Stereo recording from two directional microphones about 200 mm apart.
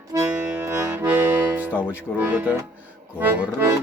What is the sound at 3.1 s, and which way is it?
Accordion, 10° right (ahead or behind).